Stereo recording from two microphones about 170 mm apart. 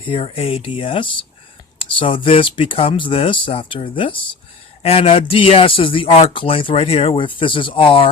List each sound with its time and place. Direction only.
0.1 s speech: 35° left (ahead or behind)